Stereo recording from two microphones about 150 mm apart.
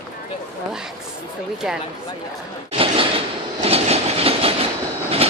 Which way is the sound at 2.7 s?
40° right (ahead or behind).